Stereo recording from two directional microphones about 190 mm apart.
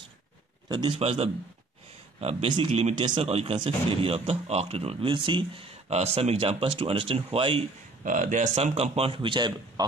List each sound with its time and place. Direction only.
0.7 s speech: 25° right (ahead or behind)
8.0 s a man's voice: 45° right (ahead or behind); by 9.8 s 25° right (ahead or behind)